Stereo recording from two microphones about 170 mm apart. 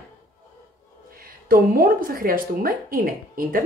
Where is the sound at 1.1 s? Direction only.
55° right (ahead or behind).